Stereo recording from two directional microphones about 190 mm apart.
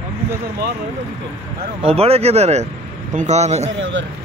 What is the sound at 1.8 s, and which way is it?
Speech, 30° right (ahead or behind).